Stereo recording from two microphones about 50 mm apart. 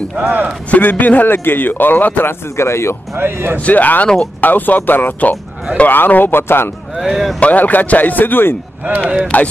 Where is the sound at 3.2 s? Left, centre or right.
Right.